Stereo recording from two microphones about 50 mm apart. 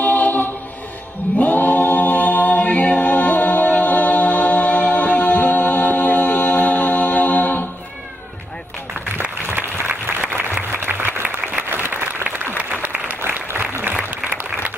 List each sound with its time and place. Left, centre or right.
0.0 s choir: left
9.2 s applause: right
10.2 s applause: right
11.0 s applause: right
11.2 s applause: right
11.7 s applause: right
13.5 s applause: right